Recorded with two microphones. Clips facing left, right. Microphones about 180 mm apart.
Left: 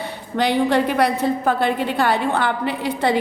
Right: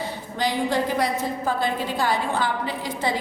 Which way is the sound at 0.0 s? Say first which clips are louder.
Left 4 dB; 65° left (ahead or behind).